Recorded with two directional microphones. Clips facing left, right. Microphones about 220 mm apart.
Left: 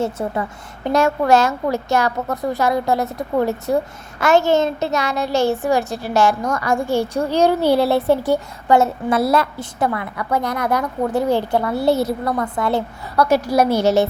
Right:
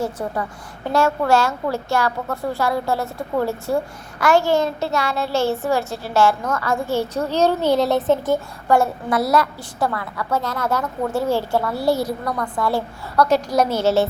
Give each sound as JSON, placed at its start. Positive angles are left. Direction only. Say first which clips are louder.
{"t": 0.0, "sound": "a woman's voice", "louder": "left 3 dB", "side_deg": 25}
{"t": 13.1, "sound": "a woman's voice", "louder": "left 1 dB", "side_deg": 10}